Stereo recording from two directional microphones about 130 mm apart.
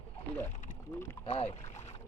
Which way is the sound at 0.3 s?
20° left (ahead or behind).